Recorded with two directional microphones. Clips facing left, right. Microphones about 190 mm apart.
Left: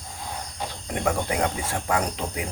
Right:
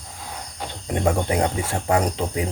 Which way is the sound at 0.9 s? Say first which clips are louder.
Right 4 dB; 25° right (ahead or behind).